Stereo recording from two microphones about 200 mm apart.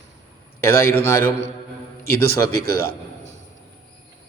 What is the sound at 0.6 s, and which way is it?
Mantra, 10° left (ahead or behind).